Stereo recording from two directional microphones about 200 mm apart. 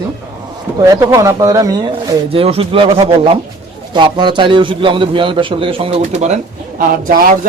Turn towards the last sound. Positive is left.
turn(degrees=-45)  # may be behind; listen again after turning